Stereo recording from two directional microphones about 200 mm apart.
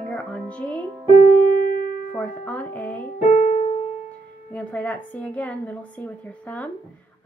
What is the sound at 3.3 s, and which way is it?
Piano, 40° left (ahead or behind).